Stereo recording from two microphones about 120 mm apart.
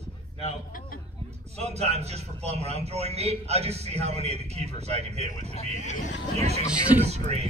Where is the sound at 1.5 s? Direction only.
60° right (ahead or behind).